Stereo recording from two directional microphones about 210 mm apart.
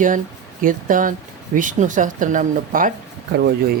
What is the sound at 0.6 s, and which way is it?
Speech, 40° right (ahead or behind).